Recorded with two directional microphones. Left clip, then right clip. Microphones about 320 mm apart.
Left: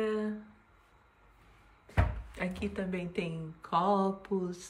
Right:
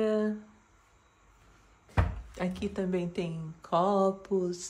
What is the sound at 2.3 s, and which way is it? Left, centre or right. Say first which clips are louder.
Speech: right 4 dB; centre.